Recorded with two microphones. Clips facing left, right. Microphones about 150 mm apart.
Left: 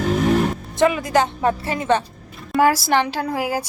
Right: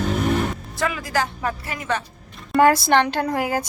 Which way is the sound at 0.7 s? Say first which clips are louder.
Left 8 dB; 20° left (ahead or behind).